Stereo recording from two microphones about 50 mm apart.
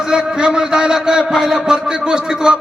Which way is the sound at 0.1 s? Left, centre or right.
Centre.